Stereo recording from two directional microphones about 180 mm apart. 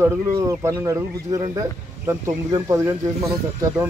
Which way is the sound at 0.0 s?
15° right (ahead or behind).